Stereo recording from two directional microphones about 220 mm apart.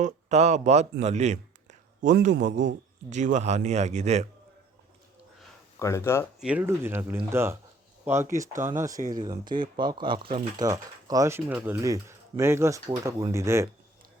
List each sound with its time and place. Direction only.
0.0 s a man's voice: 30° right (ahead or behind)
5.8 s speech: 10° left (ahead or behind)
6.4 s speech: 5° right (ahead or behind)
9.0 s a man's voice: 40° right (ahead or behind)
9.5 s speech: 20° right (ahead or behind)